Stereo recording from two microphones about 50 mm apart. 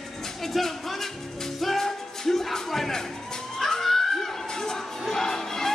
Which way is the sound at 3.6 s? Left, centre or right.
Centre.